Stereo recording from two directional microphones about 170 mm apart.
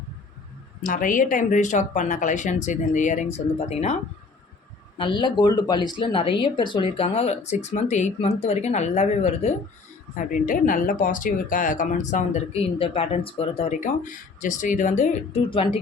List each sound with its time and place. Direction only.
0.8 s speech: 50° left (ahead or behind)
4.9 s speech: 30° left (ahead or behind); by 12.4 s 45° left (ahead or behind)
12.8 s speech: 35° left (ahead or behind)